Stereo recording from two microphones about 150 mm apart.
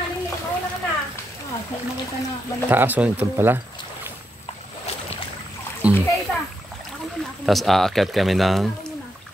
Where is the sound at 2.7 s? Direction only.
10° right (ahead or behind).